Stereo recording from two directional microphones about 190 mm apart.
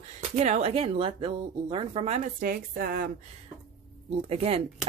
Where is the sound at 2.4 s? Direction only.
50° right (ahead or behind).